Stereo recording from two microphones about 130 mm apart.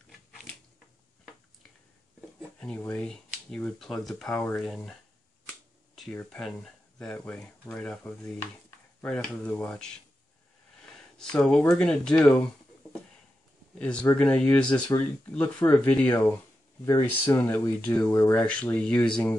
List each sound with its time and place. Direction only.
2.8 s speech: 10° left (ahead or behind)
5.5 s finger snapping: 5° left (ahead or behind)
7.0 s speech: 5° left (ahead or behind)
8.4 s a sound: 15° left (ahead or behind)
9.1 s speech: 10° left (ahead or behind)
10.8 s a sound: 5° left (ahead or behind)
11.8 s speech: 5° left (ahead or behind)
12.8 s a sound: centre (ahead or behind)
13.7 s speech: 10° left (ahead or behind)
16.8 s speech: 25° left (ahead or behind)
17.4 s speech: 15° left (ahead or behind)
18.5 s speech: 10° left (ahead or behind)